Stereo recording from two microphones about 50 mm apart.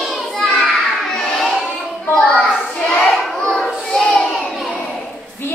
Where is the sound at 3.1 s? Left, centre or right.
Centre.